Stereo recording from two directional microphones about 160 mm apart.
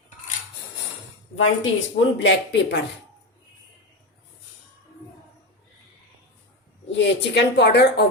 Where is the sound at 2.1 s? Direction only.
90° left.